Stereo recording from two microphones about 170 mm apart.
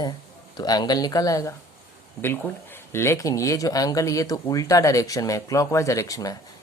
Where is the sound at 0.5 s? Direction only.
25° left (ahead or behind).